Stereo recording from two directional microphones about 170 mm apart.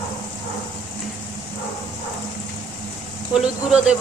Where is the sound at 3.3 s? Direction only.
5° right (ahead or behind).